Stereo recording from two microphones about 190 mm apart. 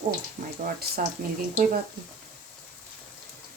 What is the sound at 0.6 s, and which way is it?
Speech, 55° right (ahead or behind).